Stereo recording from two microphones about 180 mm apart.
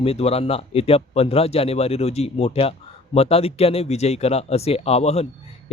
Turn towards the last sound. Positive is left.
turn(degrees=35)  # may be behind; listen again after turning